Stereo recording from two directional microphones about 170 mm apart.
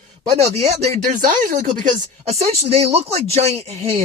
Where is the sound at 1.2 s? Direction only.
50° right (ahead or behind).